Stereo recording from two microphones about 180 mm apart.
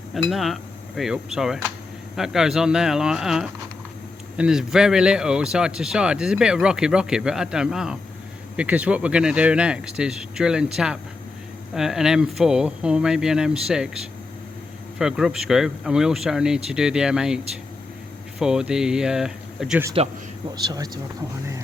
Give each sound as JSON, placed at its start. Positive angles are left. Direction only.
{"t": 0.3, "sound": "speech", "side_deg": 0}
{"t": 11.7, "sound": "speech", "side_deg": 0}
{"t": 20.7, "sound": "speech", "side_deg": -20}